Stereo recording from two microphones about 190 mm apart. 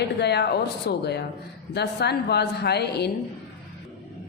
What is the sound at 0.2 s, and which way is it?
A woman's voice, 60° left (ahead or behind).